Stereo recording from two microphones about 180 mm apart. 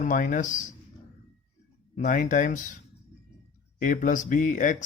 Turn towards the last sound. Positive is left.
turn(degrees=45)  # may be behind; listen again after turning